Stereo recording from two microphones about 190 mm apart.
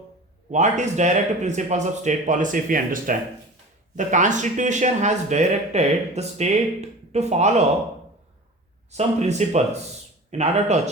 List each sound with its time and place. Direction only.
0.5 s speech: 40° right (ahead or behind)
8.9 s speech: 35° right (ahead or behind)